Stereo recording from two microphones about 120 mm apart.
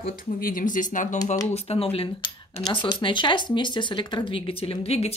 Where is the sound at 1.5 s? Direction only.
60° left (ahead or behind).